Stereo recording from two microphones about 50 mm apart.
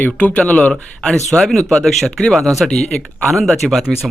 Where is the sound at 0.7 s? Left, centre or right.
Centre.